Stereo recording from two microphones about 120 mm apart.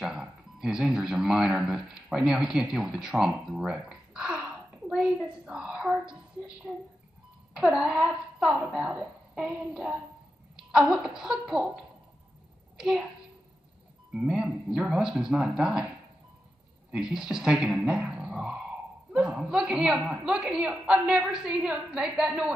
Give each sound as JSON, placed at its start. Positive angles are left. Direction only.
{"t": 0.0, "sound": "a man's voice", "side_deg": -5}
{"t": 14.1, "sound": "speech", "side_deg": -5}
{"t": 16.9, "sound": "a man's voice", "side_deg": -5}